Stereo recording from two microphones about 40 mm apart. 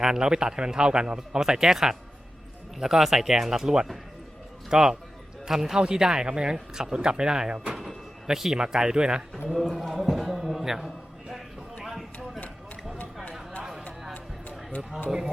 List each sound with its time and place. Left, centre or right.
0.0 s speech: centre
9.6 s a sound: centre
13.6 s music: centre
14.8 s speech: centre